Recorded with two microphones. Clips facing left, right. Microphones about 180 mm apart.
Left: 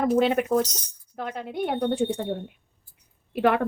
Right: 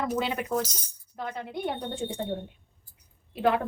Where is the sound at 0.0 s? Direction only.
55° left (ahead or behind).